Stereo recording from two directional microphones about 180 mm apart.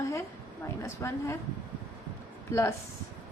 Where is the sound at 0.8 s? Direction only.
15° left (ahead or behind).